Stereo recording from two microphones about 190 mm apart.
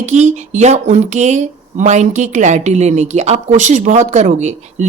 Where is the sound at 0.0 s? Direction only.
40° right (ahead or behind).